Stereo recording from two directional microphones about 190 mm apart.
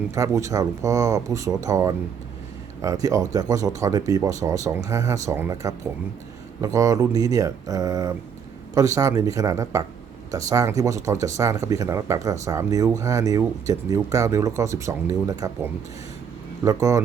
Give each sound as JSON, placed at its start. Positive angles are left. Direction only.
{"t": 0.1, "sound": "speech", "side_deg": -15}